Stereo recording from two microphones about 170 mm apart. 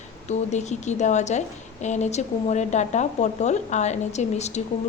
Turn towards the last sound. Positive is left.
turn(degrees=40)  # may be behind; listen again after turning